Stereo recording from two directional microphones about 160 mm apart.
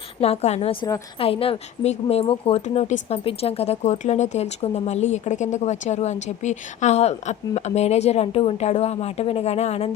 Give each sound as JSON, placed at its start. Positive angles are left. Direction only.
{"t": 0.2, "sound": "a woman's voice", "side_deg": 40}